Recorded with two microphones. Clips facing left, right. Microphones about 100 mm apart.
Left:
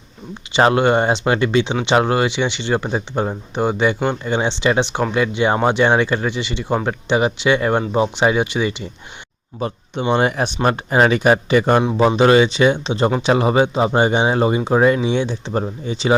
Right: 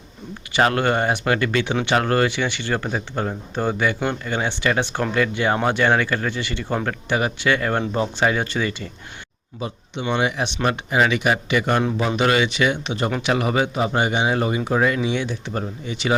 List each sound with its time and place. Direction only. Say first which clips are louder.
0.5 s speech: left 5 dB; 20° left (ahead or behind)
9.6 s speech: left 5 dB; 45° left (ahead or behind); by 16.1 s 30° left (ahead or behind)